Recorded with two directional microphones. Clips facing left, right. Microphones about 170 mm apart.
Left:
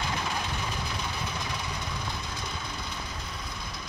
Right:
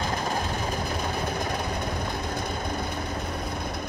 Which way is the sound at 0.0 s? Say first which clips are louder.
Right 4 dB; 45° right (ahead or behind).